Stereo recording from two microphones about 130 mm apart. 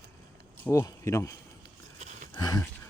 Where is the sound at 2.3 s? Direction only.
30° left (ahead or behind).